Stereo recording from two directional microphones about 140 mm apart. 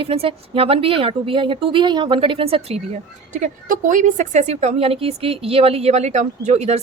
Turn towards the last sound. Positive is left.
turn(degrees=-50)  # may be behind; listen again after turning